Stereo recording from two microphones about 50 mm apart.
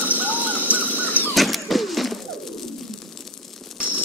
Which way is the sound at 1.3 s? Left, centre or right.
Centre.